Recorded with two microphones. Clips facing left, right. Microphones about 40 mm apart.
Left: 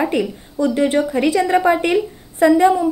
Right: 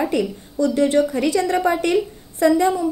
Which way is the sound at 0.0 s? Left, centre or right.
Left.